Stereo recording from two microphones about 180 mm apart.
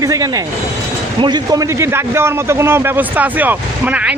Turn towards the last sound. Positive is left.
turn(degrees=-10)  # may be behind; listen again after turning